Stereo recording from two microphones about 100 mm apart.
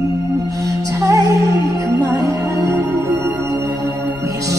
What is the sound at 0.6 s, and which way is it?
Music, 35° right (ahead or behind).